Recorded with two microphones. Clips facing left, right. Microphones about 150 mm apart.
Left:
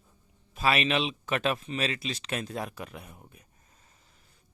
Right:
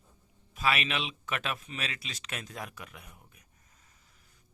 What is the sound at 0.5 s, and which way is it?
Speech, 30° left (ahead or behind).